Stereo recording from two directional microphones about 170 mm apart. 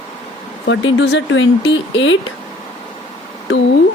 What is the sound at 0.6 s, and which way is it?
Speech, 90° left.